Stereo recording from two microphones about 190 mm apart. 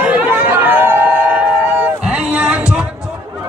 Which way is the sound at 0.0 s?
10° right (ahead or behind).